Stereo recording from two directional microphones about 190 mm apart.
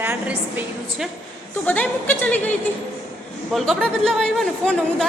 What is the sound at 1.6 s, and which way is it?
Speech, 10° left (ahead or behind).